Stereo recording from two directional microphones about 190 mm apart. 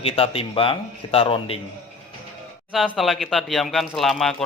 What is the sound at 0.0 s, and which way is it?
A man's voice, 30° left (ahead or behind).